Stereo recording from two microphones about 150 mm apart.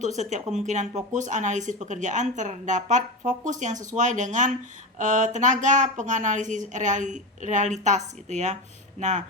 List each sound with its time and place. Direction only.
0.0 s speech: 50° right (ahead or behind)